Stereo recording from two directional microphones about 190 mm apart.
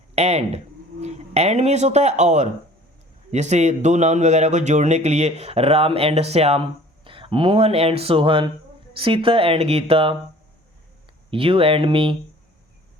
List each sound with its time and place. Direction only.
0.2 s a man's voice: 35° right (ahead or behind)
11.3 s speech: 30° right (ahead or behind)